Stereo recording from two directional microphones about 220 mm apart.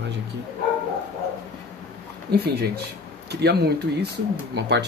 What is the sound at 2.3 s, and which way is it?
Speech, 45° right (ahead or behind).